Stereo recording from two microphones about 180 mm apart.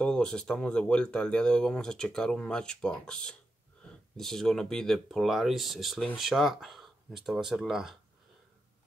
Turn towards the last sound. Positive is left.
turn(degrees=0)  # may be behind; listen again after turning